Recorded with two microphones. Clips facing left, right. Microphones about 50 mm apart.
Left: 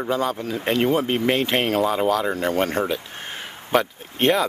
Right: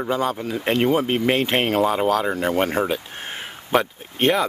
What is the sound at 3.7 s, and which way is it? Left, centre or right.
Speech, centre.